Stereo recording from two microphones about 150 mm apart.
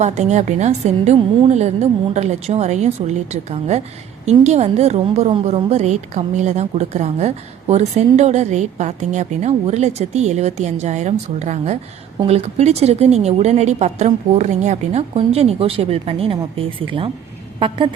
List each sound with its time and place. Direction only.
0.0 s a woman's voice: 50° right (ahead or behind)